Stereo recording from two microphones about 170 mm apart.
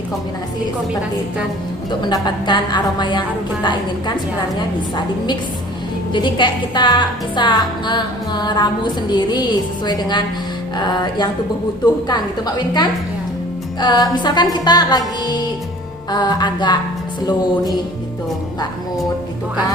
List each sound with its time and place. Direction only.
2.0 s speech: 25° left (ahead or behind)